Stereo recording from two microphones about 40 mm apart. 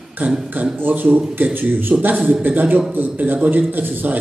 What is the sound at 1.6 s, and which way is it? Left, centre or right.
A man's voice, right.